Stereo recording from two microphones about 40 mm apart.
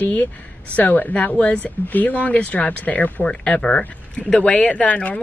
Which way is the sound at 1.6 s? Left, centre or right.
Left.